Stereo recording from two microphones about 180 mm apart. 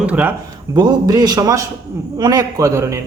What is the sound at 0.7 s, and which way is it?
A man's voice, 20° right (ahead or behind).